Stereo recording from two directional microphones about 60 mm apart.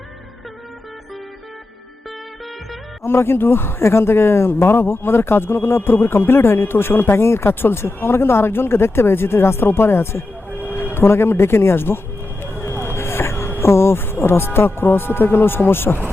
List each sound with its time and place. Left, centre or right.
3.0 s speech: left
12.4 s vehicle: left
13.6 s speech: left